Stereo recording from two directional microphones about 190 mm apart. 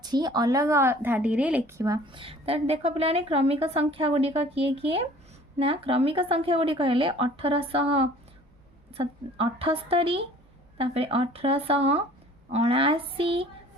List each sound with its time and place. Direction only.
0.0 s speech: 20° right (ahead or behind)
1.8 s a woman's voice: 25° right (ahead or behind)